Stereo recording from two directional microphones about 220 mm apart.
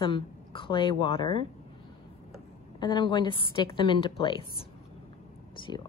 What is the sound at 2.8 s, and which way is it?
Speech, 20° left (ahead or behind).